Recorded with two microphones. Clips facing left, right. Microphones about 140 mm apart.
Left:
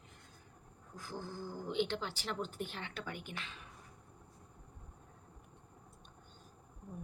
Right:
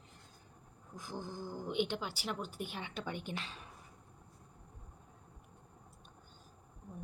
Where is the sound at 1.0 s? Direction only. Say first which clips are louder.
Right 1 dB; 15° right (ahead or behind); by 3.6 s 30° right (ahead or behind).